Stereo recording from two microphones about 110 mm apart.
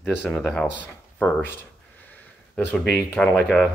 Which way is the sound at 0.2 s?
5° left (ahead or behind).